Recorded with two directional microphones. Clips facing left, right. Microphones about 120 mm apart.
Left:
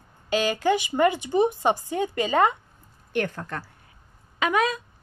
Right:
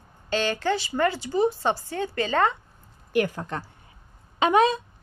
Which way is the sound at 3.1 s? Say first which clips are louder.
Right 3 dB; 10° right (ahead or behind).